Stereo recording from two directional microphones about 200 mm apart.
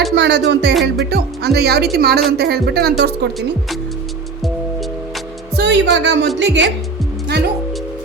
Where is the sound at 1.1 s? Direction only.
55° right (ahead or behind).